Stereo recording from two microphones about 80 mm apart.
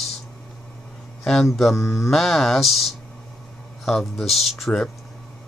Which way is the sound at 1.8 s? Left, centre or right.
Left.